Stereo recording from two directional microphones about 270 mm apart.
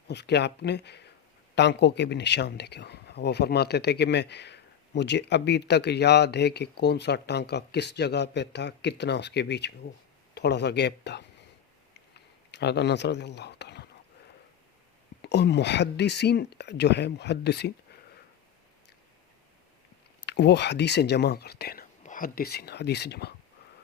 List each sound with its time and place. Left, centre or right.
0.1 s a man's voice: left
12.1 s a sound: left
15.2 s a man's voice: left
20.2 s a man's voice: left